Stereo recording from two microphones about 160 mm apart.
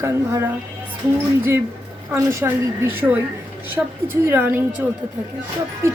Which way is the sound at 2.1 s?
15° right (ahead or behind).